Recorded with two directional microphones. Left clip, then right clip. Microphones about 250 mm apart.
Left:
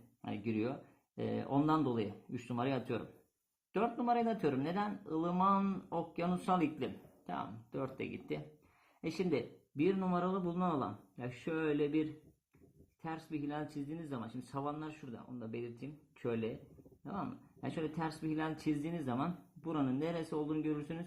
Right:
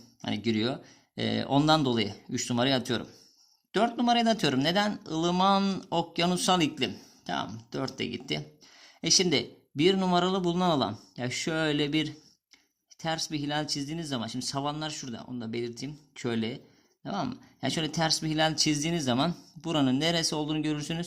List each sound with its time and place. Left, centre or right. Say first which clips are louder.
0.2 s speech: right 9 dB; right